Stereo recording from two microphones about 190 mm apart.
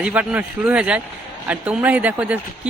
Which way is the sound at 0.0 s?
5° right (ahead or behind).